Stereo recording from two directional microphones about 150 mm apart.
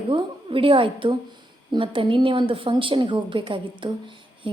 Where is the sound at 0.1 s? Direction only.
35° right (ahead or behind).